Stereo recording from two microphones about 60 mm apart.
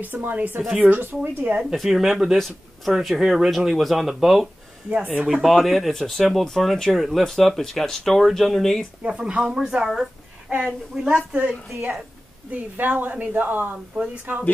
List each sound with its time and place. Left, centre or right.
0.0 s a woman's voice: right
1.8 s speech: centre
4.9 s a woman's voice: right
5.4 s speech: centre
9.1 s a woman's voice: centre; by 14.4 s right